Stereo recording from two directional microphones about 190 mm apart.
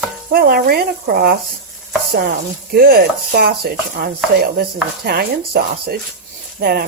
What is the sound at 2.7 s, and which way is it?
Speech, 50° right (ahead or behind).